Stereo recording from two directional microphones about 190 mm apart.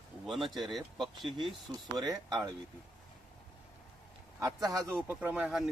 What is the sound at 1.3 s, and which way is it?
Speech, 20° right (ahead or behind).